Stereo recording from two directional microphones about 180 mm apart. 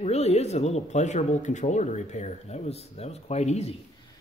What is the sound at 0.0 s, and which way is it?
Speech, 35° left (ahead or behind).